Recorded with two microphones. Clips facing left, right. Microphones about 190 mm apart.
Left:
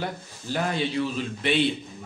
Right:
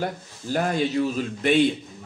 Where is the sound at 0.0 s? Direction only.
45° right (ahead or behind).